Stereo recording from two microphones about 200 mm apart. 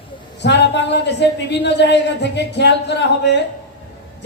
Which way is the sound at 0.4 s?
60° left (ahead or behind).